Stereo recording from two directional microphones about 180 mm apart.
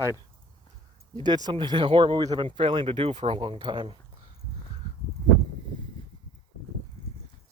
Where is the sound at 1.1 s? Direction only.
25° right (ahead or behind).